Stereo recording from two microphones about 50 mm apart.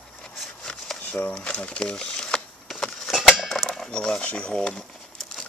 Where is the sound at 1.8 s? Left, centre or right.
Centre.